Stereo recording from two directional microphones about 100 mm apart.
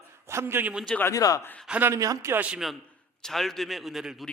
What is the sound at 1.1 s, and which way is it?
Speech, 35° left (ahead or behind).